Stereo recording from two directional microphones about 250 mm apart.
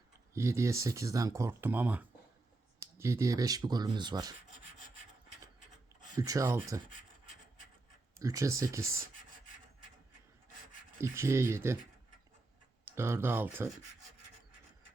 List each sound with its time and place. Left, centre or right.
0.3 s speech: centre
6.1 s speech: centre
8.2 s speech: centre
11.0 s speech: centre
12.8 s speech: centre